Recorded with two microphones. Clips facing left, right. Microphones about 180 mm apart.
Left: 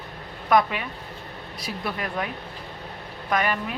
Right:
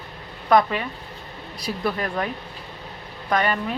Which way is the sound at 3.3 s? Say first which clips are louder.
Right 2 dB; 5° left (ahead or behind).